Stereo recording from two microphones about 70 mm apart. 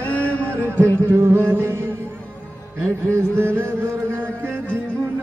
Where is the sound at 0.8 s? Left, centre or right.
Right.